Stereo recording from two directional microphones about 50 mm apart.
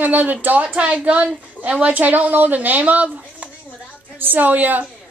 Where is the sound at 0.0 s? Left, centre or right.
Right.